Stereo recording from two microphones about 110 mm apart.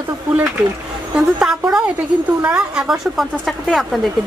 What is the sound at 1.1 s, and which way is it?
A woman's voice, 5° right (ahead or behind).